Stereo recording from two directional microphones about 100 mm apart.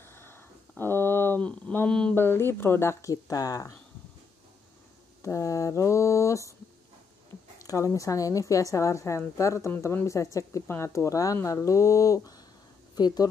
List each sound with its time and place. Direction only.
0.0 s a sound: 25° left (ahead or behind); by 2.1 s 10° left (ahead or behind)
2.1 s speech: 25° left (ahead or behind)
5.2 s a woman's voice: 30° left (ahead or behind)
7.6 s a woman's voice: 35° left (ahead or behind)